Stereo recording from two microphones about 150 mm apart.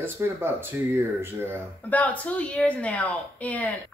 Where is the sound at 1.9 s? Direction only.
10° left (ahead or behind).